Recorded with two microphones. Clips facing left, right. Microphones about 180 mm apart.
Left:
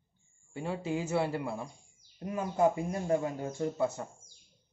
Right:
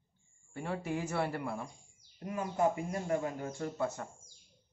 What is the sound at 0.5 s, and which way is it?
Speech, 25° left (ahead or behind).